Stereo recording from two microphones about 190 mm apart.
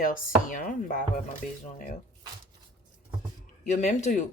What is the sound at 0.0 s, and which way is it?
Speech, 45° left (ahead or behind).